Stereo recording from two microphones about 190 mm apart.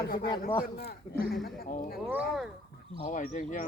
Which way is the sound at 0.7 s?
55° left (ahead or behind).